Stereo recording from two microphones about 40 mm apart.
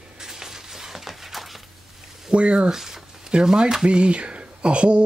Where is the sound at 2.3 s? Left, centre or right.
Right.